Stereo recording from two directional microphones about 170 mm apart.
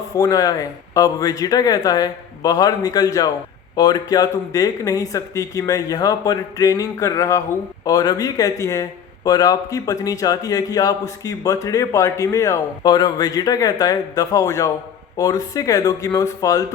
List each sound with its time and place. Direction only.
0.1 s speech: 20° left (ahead or behind)